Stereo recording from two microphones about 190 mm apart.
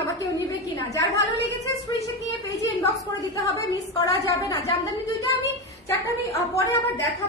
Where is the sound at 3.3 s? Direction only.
15° left (ahead or behind).